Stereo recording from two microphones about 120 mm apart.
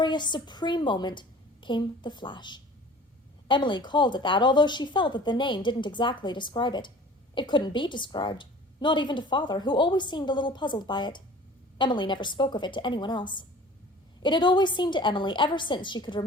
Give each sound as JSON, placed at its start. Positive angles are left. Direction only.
{"t": 0.0, "sound": "a woman's voice", "side_deg": 40}